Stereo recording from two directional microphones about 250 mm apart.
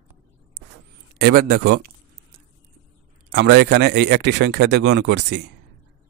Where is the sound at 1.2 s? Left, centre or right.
Right.